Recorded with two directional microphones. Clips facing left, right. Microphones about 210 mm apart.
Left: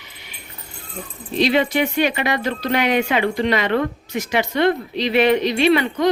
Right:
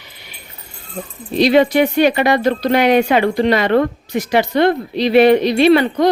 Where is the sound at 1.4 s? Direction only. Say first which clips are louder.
Right 6 dB; 40° right (ahead or behind).